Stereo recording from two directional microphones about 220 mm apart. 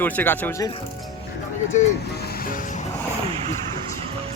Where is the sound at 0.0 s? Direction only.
10° left (ahead or behind).